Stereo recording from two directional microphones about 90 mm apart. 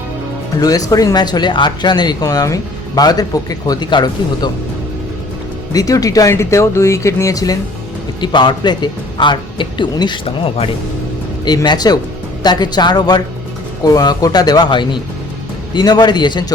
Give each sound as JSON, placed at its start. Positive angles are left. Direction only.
{"t": 0.6, "sound": "speech", "side_deg": 45}
{"t": 5.7, "sound": "speech", "side_deg": 40}
{"t": 8.2, "sound": "speech", "side_deg": 60}
{"t": 11.4, "sound": "speech", "side_deg": 50}